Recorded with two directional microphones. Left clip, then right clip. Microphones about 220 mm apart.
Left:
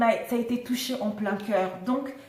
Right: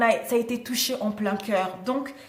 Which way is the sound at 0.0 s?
45° right (ahead or behind).